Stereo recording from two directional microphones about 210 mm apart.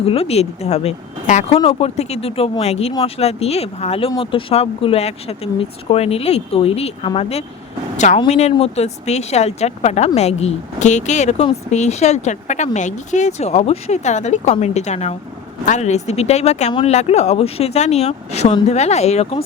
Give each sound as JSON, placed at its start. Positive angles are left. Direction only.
{"t": 0.0, "sound": "speech", "side_deg": 30}